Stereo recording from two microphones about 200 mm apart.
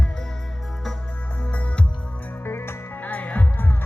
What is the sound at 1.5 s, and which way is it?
Music, 5° left (ahead or behind).